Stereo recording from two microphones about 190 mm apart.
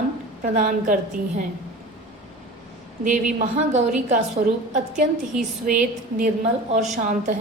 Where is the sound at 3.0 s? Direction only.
40° right (ahead or behind).